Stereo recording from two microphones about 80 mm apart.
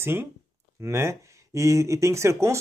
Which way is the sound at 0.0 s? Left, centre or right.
Right.